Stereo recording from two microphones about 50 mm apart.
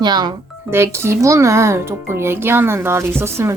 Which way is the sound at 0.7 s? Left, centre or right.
Right.